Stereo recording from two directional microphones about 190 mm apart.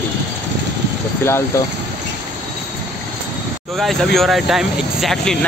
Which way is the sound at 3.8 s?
Centre (ahead or behind).